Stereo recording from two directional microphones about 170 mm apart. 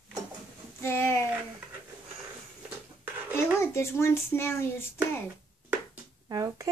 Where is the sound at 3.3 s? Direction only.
15° left (ahead or behind).